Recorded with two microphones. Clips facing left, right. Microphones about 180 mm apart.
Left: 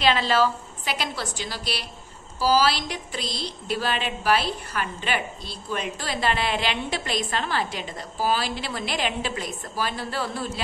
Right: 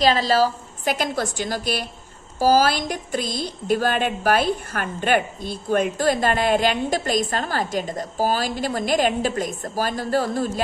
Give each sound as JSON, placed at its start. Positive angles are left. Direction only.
{"t": 0.0, "sound": "a woman's voice", "side_deg": -40}